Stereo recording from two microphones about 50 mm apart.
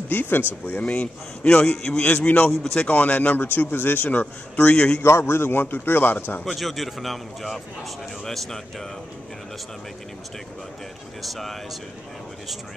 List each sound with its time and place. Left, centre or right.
0.1 s a man's voice: left
0.7 s a man's voice: left; by 2.0 s centre
2.0 s a man's voice: left
2.6 s speech: centre
2.9 s a man's voice: left
5.0 s a man's voice: left
6.4 s a man's voice: centre
11.2 s a man's voice: centre